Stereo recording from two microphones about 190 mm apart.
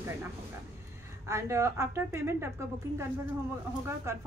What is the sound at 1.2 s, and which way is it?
A woman's voice, 15° right (ahead or behind).